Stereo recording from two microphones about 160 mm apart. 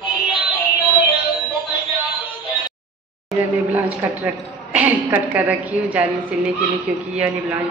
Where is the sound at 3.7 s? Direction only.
10° right (ahead or behind).